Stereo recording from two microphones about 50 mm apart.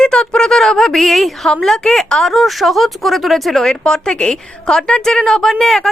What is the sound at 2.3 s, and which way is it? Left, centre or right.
Speech, centre.